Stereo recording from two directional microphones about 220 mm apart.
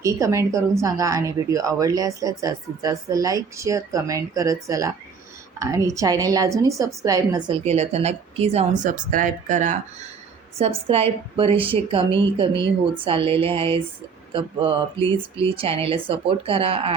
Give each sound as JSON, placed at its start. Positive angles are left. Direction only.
{"t": 0.0, "sound": "a woman's voice", "side_deg": -15}
{"t": 6.0, "sound": "a woman's voice", "side_deg": -15}